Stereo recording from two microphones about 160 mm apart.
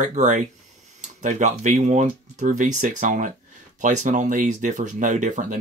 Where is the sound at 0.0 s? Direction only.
50° right (ahead or behind).